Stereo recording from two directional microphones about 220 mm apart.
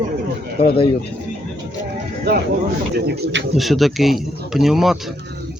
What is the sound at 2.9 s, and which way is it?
Speech, 45° right (ahead or behind).